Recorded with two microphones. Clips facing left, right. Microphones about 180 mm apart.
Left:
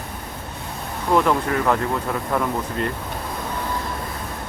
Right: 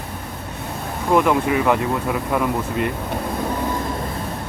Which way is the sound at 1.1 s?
10° right (ahead or behind).